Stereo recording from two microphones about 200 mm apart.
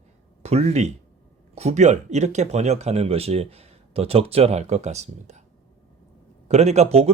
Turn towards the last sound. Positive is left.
turn(degrees=-30)  # may be behind; listen again after turning